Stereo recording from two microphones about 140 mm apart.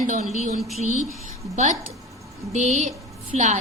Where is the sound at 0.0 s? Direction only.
65° right (ahead or behind).